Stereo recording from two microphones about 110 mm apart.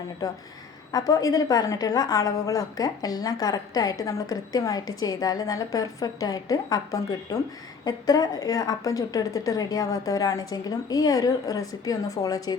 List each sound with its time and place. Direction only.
0.2 s a woman's voice: 35° left (ahead or behind)